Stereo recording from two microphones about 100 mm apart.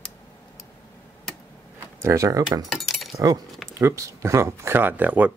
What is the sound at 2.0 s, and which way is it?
Speech, 30° right (ahead or behind).